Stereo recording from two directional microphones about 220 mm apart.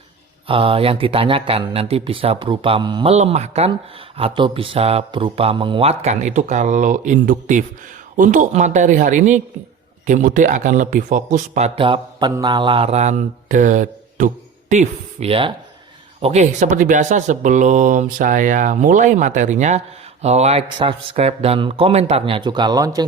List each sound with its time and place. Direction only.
0.4 s speech: 25° right (ahead or behind)